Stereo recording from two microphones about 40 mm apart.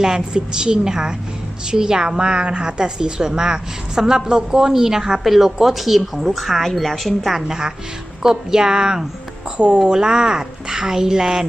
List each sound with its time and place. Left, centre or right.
0.0 s a woman's voice: centre
7.3 s a woman's voice: centre